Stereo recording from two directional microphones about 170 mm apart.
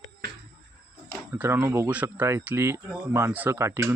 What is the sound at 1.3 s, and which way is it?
Speech, 15° right (ahead or behind).